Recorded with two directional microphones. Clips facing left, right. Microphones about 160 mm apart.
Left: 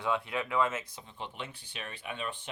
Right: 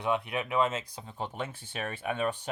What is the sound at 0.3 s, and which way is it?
Speech, 20° right (ahead or behind).